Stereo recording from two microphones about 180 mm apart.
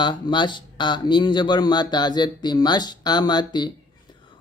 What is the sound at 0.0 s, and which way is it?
Speech, 25° left (ahead or behind).